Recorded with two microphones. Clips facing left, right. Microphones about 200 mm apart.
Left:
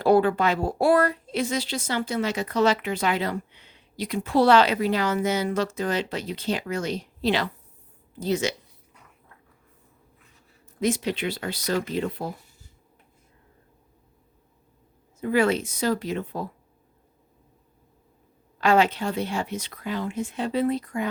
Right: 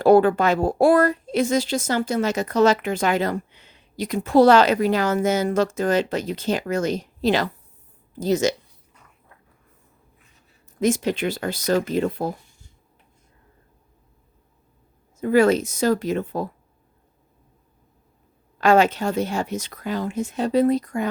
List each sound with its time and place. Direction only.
0.0 s a woman's voice: 45° right (ahead or behind)
10.8 s a woman's voice: 45° right (ahead or behind)
15.2 s a woman's voice: 45° right (ahead or behind)
18.6 s a woman's voice: 45° right (ahead or behind)